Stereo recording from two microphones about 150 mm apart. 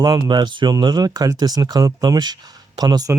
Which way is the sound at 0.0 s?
25° right (ahead or behind).